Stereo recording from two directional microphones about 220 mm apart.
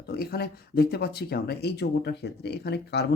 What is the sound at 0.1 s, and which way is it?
A man's voice, 45° left (ahead or behind).